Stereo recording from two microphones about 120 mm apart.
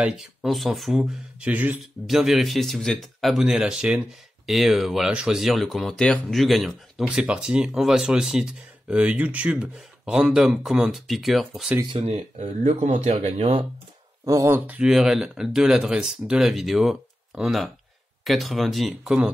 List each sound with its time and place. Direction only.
0.0 s speech: 5° right (ahead or behind)
2.0 s speech: centre (ahead or behind)
12.0 s speech: 60° right (ahead or behind)
14.2 s speech: 30° right (ahead or behind)
14.7 s speech: 5° right (ahead or behind)